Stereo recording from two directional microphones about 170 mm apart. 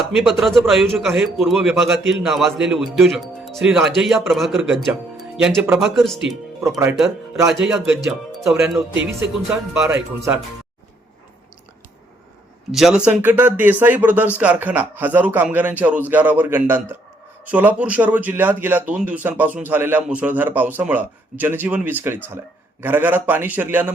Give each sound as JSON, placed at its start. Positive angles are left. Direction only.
{"t": 0.2, "sound": "a man's voice", "side_deg": 0}
{"t": 6.6, "sound": "speech", "side_deg": -15}
{"t": 7.6, "sound": "a man's voice", "side_deg": -5}
{"t": 12.7, "sound": "speech", "side_deg": -5}